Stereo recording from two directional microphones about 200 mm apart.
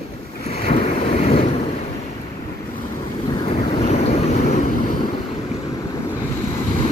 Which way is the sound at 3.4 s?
30° left (ahead or behind).